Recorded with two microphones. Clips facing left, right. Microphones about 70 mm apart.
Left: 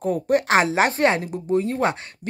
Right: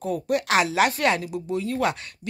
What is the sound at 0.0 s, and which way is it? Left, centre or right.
Speech, left.